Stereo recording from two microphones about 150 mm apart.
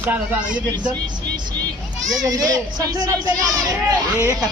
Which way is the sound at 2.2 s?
25° right (ahead or behind).